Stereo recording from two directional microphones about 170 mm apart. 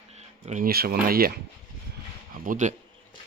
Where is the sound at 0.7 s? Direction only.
65° right (ahead or behind).